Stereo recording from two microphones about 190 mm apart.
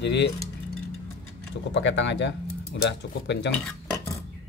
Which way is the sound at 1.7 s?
70° left (ahead or behind).